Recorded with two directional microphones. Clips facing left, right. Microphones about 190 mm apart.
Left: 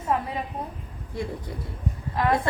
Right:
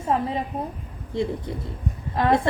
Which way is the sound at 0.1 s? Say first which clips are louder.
Right 3 dB; 30° right (ahead or behind).